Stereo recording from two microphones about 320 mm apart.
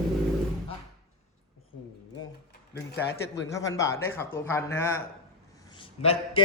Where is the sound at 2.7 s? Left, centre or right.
Left.